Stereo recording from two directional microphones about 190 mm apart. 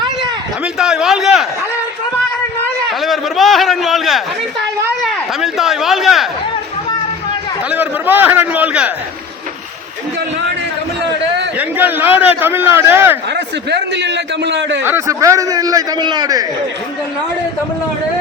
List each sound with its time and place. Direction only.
0.6 s a man's voice: 5° right (ahead or behind)
3.0 s a man's voice: centre (ahead or behind)
7.7 s a man's voice: 10° right (ahead or behind)
11.5 s a man's voice: 10° right (ahead or behind)
13.3 s a man's voice: 65° right (ahead or behind)
14.8 s a man's voice: 15° right (ahead or behind)